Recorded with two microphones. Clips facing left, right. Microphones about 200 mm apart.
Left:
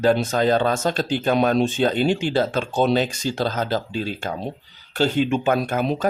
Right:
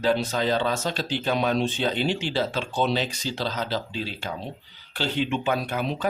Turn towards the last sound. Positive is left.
turn(degrees=45)  # may be behind; listen again after turning